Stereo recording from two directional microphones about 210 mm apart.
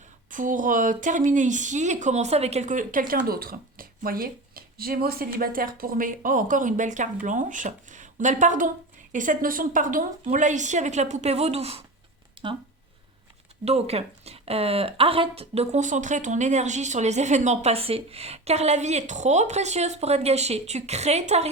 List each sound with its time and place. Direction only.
0.3 s speech: 40° right (ahead or behind)
12.4 s a sound: 25° right (ahead or behind)
13.7 s speech: 30° right (ahead or behind)